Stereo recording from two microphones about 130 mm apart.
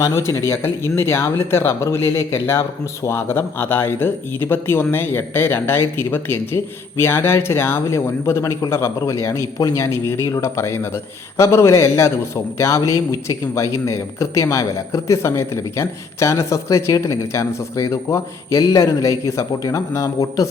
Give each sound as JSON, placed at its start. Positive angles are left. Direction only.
{"t": 0.0, "sound": "speech", "side_deg": 20}